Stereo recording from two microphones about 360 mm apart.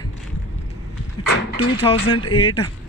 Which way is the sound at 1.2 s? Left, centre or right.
Centre.